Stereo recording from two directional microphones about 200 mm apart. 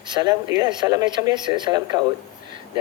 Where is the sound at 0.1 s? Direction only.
20° right (ahead or behind).